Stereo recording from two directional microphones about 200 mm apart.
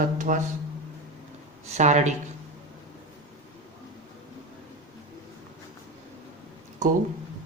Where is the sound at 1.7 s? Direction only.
35° right (ahead or behind).